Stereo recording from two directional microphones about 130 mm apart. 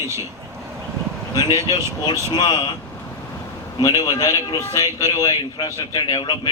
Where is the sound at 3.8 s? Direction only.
25° left (ahead or behind).